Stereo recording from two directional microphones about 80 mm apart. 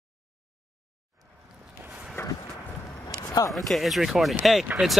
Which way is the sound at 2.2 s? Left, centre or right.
Left.